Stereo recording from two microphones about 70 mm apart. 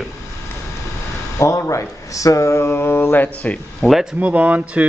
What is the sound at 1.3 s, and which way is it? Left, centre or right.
Speech, left.